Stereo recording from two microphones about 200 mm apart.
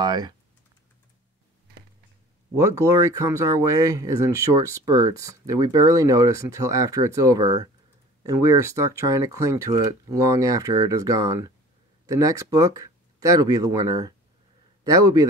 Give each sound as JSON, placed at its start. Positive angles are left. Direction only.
{"t": 0.0, "sound": "speech", "side_deg": -20}
{"t": 2.5, "sound": "a man's voice", "side_deg": -15}